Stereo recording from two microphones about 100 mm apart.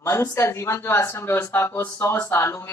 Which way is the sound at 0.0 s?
30° left (ahead or behind).